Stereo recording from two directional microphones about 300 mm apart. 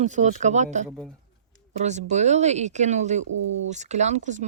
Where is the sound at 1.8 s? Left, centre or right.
Right.